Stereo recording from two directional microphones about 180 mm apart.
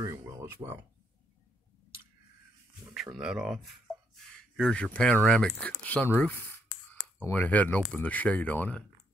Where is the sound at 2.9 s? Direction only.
Centre (ahead or behind).